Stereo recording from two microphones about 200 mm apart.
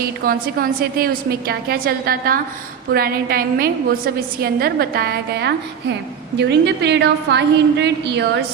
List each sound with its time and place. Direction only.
0.3 s a woman's voice: 45° right (ahead or behind)